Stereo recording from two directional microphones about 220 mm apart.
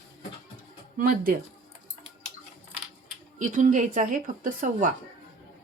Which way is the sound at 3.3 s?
35° right (ahead or behind).